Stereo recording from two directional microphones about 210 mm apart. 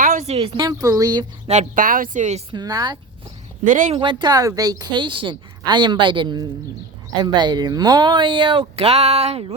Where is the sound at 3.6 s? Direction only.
35° right (ahead or behind).